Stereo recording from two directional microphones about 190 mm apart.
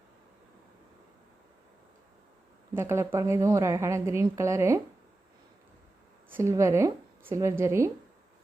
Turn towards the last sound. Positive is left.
turn(degrees=-15)  # may be behind; listen again after turning